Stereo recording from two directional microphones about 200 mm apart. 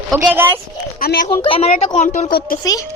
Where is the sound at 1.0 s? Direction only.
45° left (ahead or behind).